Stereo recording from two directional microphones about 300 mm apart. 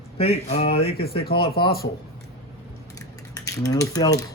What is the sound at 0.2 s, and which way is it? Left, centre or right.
Speech, left.